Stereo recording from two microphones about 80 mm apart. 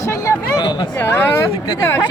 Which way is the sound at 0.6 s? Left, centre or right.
Left.